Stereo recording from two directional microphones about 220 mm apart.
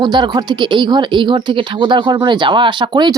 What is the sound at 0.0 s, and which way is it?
Speech, 20° right (ahead or behind).